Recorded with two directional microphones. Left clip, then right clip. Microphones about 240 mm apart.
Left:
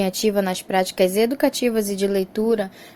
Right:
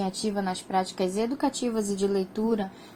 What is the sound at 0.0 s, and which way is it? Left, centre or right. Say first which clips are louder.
Speech: left 9 dB; left.